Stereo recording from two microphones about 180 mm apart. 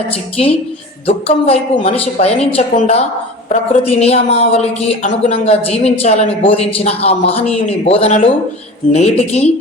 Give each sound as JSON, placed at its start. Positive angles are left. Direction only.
{"t": 1.0, "sound": "a man's voice", "side_deg": 30}